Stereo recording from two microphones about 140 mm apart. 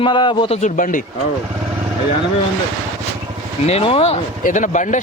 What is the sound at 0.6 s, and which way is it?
Speech, 70° left (ahead or behind).